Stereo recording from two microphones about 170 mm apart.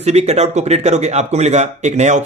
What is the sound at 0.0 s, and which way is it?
Speech, 40° right (ahead or behind).